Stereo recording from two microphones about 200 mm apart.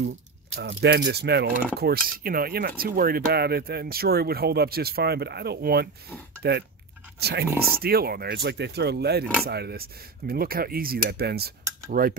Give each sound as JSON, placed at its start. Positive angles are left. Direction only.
{"t": 0.6, "sound": "speech", "side_deg": -55}